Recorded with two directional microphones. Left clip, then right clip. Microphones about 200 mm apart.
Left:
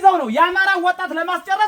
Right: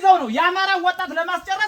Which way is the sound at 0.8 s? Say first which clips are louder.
Left 2 dB; 60° left (ahead or behind).